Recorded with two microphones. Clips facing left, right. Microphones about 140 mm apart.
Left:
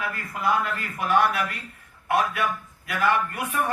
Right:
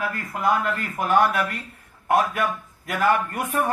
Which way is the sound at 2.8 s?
45° right (ahead or behind).